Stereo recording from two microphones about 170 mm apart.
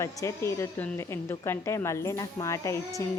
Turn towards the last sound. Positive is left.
turn(degrees=20)  # may be behind; listen again after turning